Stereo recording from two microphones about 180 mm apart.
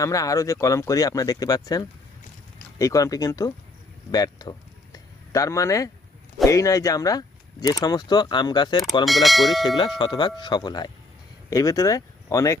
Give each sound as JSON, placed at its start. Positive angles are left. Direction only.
{"t": 0.0, "sound": "speech", "side_deg": 20}
{"t": 4.1, "sound": "a sound", "side_deg": 20}
{"t": 6.4, "sound": "speech", "side_deg": 20}
{"t": 9.0, "sound": "speech", "side_deg": 0}
{"t": 9.6, "sound": "speech", "side_deg": 25}